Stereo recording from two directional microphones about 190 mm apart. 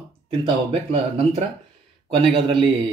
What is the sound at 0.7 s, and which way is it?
A man's voice, 30° right (ahead or behind).